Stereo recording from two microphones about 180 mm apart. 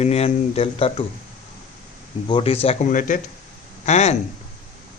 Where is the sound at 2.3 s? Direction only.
30° left (ahead or behind).